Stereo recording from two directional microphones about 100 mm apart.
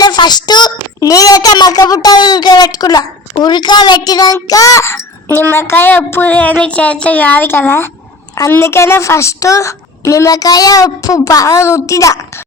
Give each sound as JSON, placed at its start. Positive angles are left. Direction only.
{"t": 0.0, "sound": "a child's voice", "side_deg": 45}